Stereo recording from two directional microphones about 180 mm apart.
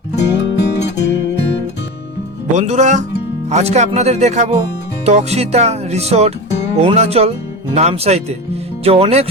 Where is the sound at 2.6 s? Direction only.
40° right (ahead or behind).